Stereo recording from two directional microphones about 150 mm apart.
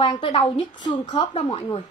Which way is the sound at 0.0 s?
35° left (ahead or behind).